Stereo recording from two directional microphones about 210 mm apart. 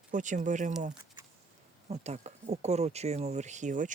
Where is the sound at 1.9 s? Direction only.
30° right (ahead or behind).